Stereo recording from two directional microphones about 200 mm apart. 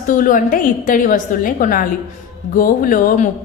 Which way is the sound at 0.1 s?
40° left (ahead or behind).